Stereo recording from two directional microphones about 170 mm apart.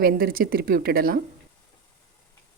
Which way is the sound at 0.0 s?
60° right (ahead or behind).